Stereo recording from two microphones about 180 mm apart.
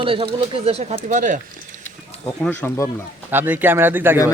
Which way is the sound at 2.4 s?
10° left (ahead or behind).